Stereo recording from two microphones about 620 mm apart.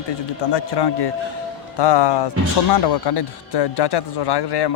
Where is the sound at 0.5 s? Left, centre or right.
Left.